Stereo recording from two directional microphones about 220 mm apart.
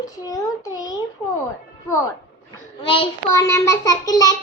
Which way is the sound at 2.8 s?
25° left (ahead or behind).